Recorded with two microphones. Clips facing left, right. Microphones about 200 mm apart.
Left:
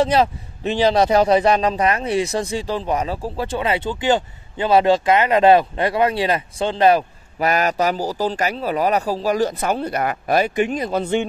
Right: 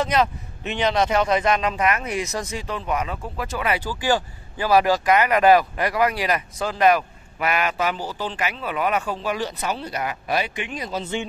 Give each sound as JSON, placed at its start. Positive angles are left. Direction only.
{"t": 0.0, "sound": "a man's voice", "side_deg": 30}